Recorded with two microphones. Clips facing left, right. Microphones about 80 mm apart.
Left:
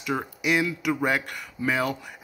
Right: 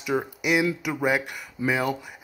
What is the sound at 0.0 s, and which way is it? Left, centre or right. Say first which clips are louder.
Speech: right 2 dB; centre.